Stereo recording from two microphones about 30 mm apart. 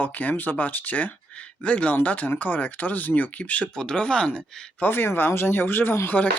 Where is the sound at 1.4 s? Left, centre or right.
Left.